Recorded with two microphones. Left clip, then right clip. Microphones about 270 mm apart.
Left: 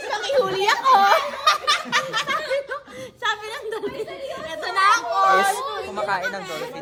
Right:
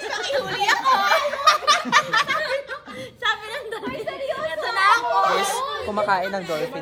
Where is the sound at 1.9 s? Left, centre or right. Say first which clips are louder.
Right 4 dB; right.